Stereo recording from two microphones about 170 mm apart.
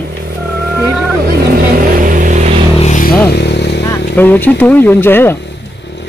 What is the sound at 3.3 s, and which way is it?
Motorcycle, 85° left.